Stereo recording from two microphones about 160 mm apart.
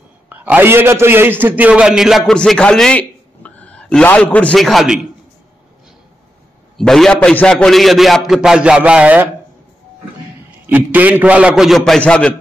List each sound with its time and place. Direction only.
0.3 s a man's voice: 10° right (ahead or behind)
6.8 s a man's voice: 5° left (ahead or behind)
10.7 s a man's voice: 10° right (ahead or behind); by 12.4 s 5° left (ahead or behind)